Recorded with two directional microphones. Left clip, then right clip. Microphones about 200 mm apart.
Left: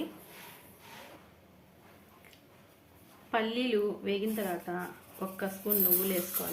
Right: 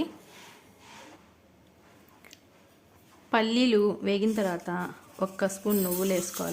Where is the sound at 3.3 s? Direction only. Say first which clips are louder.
Right 6 dB; 55° right (ahead or behind).